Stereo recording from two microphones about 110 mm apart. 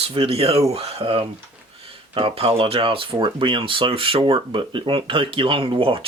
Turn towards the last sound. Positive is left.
turn(degrees=-55)  # may be behind; listen again after turning